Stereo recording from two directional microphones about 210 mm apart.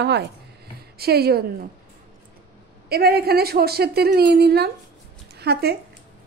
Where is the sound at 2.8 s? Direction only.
45° right (ahead or behind).